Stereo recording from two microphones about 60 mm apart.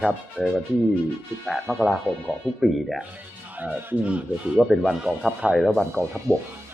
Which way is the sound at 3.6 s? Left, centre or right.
Right.